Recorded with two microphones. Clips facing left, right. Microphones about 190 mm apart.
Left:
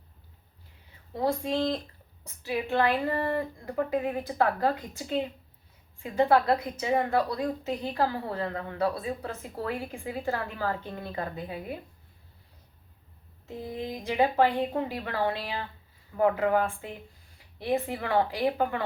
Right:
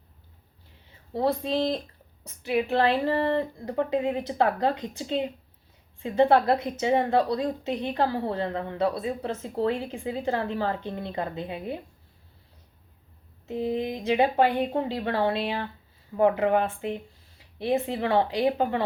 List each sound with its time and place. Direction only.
1.1 s a woman's voice: 30° right (ahead or behind)
13.5 s a woman's voice: 20° right (ahead or behind)